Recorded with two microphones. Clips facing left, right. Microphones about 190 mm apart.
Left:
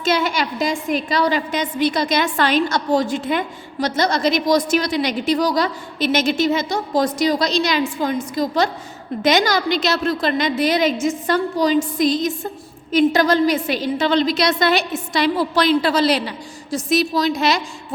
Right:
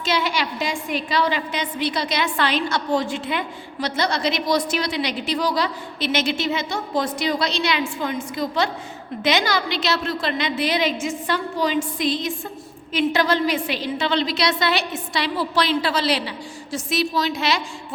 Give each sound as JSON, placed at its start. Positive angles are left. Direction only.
{"t": 0.0, "sound": "a woman's voice", "side_deg": 45}